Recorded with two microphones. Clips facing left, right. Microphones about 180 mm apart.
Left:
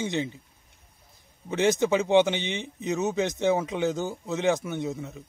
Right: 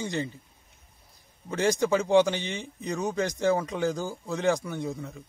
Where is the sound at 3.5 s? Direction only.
5° left (ahead or behind).